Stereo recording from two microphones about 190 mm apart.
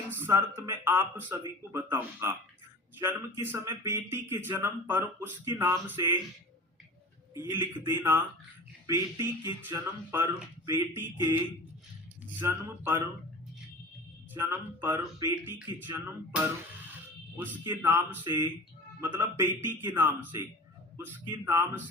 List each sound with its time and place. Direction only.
0.1 s speech: 10° right (ahead or behind)
7.3 s speech: 10° right (ahead or behind)
12.4 s speech: 15° right (ahead or behind)
14.3 s speech: 10° right (ahead or behind)